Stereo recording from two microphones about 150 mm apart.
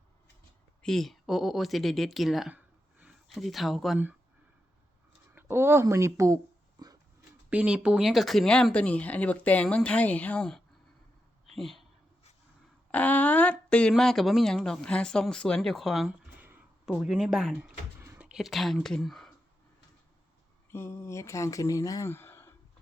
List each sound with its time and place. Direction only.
0.8 s speech: 5° left (ahead or behind)
5.3 s speech: 15° right (ahead or behind)
7.5 s speech: 5° right (ahead or behind)
11.5 s a sound: centre (ahead or behind)
12.9 s speech: 10° left (ahead or behind)
17.6 s a sound: 15° right (ahead or behind)
18.3 s speech: 5° right (ahead or behind)
20.7 s speech: 15° left (ahead or behind)